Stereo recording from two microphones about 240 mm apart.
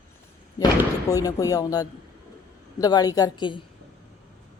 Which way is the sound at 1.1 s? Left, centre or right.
Centre.